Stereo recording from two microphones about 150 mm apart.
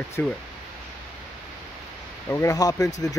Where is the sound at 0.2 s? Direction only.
15° left (ahead or behind).